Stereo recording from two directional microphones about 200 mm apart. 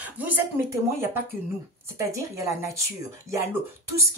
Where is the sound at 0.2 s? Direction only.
10° right (ahead or behind).